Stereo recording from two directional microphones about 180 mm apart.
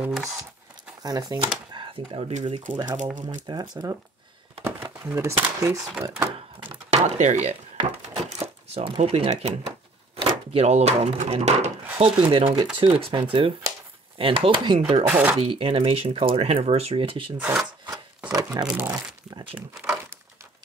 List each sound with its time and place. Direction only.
0.0 s speech: centre (ahead or behind)
1.0 s speech: 20° right (ahead or behind)
3.2 s speech: 45° right (ahead or behind)
3.4 s speech: 20° right (ahead or behind)
5.0 s speech: 15° right (ahead or behind)
6.7 s speech: 40° right (ahead or behind)
7.7 s a sound: 35° right (ahead or behind)
10.2 s speech: 35° right (ahead or behind)
15.0 s speech: 10° right (ahead or behind)
15.3 s speech: 30° right (ahead or behind)
18.3 s shuffling cards: 20° right (ahead or behind)
18.7 s speech: 10° right (ahead or behind)